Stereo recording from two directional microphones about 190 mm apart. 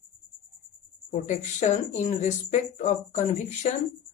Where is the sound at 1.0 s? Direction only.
40° left (ahead or behind).